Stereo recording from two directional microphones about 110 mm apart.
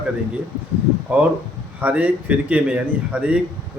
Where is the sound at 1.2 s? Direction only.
15° right (ahead or behind).